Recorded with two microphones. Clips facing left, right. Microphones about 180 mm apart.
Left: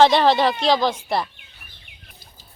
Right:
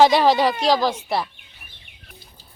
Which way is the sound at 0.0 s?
10° right (ahead or behind).